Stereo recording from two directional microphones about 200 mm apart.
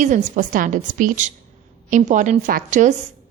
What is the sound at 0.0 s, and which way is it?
A woman's voice, 40° right (ahead or behind).